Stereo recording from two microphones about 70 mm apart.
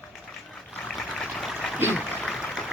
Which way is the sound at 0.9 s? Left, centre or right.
Centre.